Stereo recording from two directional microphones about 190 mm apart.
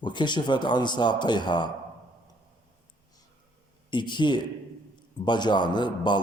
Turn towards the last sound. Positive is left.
turn(degrees=25)  # may be behind; listen again after turning